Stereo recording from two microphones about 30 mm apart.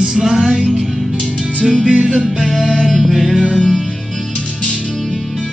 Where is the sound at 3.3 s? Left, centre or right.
Right.